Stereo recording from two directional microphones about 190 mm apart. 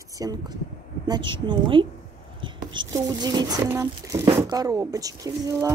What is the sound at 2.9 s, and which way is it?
Speech, 20° right (ahead or behind).